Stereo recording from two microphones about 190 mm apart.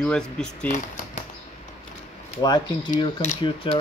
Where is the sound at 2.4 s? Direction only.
20° left (ahead or behind).